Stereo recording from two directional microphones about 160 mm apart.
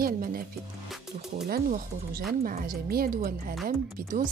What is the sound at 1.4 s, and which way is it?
Speech, 60° right (ahead or behind).